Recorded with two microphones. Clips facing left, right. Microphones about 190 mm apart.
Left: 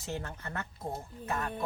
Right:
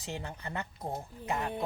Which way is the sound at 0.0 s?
15° right (ahead or behind).